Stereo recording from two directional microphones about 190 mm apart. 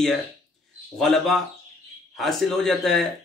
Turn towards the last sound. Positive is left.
turn(degrees=0)  # may be behind; listen again after turning